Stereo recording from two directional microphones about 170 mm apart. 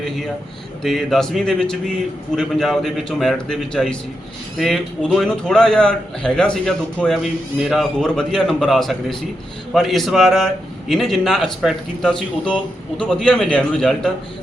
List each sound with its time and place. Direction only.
0.8 s a man's voice: centre (ahead or behind)